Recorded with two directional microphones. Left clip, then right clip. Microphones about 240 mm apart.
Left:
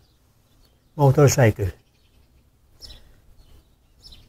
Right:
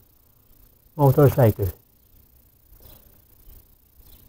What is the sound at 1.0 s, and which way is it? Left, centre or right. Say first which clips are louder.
Speech: even; centre.